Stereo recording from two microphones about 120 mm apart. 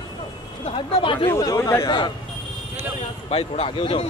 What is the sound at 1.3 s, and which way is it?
Speech, 25° left (ahead or behind).